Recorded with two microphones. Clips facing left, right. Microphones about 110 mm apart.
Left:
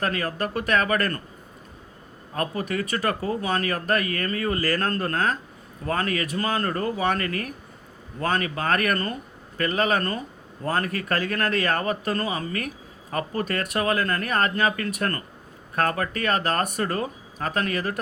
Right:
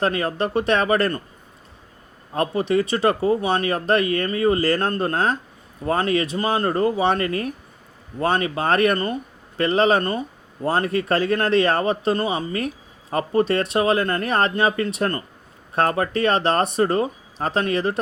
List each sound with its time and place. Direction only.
0.0 s speech: 25° right (ahead or behind)
2.3 s speech: 25° right (ahead or behind)